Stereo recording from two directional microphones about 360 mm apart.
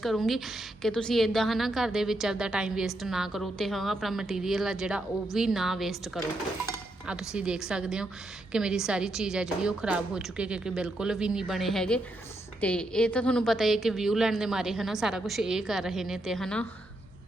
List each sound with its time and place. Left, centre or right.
0.0 s a woman's voice: centre
6.7 s dishes: centre
8.5 s a woman's voice: centre